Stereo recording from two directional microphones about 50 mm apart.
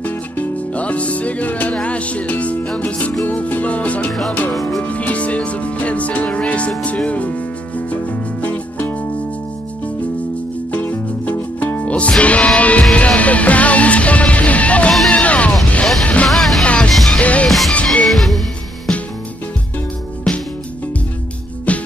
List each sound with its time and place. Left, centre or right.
0.0 s music: left
4.5 s music: centre
4.8 s music: left
10.7 s music: left
11.8 s music: left
16.3 s music: centre
16.6 s music: left
16.9 s music: centre
17.2 s music: left
17.5 s music: centre
20.3 s music: centre
21.7 s music: left